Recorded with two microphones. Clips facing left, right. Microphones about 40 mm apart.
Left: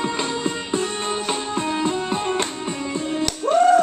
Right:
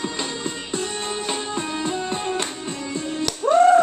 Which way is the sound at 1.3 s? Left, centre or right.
Centre.